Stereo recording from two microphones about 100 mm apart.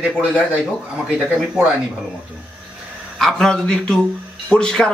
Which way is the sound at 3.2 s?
5° left (ahead or behind).